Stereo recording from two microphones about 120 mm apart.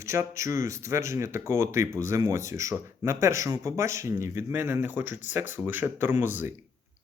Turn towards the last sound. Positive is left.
turn(degrees=-15)  # may be behind; listen again after turning